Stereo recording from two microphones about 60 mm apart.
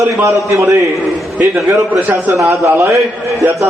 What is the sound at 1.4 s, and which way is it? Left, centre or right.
Speech, right.